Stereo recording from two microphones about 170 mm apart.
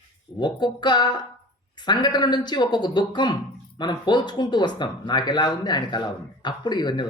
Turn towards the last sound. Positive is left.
turn(degrees=25)  # may be behind; listen again after turning